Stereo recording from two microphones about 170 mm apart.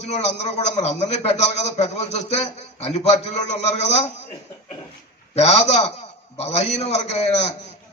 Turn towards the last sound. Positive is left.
turn(degrees=40)  # may be behind; listen again after turning